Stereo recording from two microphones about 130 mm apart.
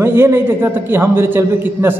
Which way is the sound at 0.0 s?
20° right (ahead or behind).